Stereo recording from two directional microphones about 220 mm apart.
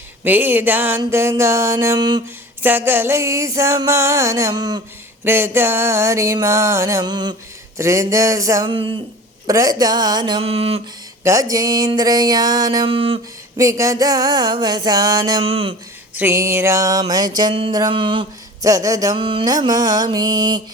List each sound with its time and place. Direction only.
0.3 s music: 10° right (ahead or behind)
9.5 s speech: 15° right (ahead or behind)
11.2 s music: 15° right (ahead or behind)
16.1 s music: 10° right (ahead or behind)